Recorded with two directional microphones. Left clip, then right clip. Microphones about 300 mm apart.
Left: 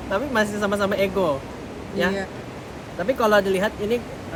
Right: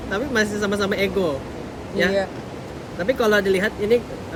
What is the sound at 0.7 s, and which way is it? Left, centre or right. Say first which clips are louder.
Speech: even; centre.